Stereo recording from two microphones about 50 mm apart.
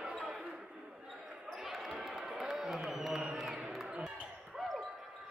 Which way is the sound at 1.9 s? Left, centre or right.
Centre.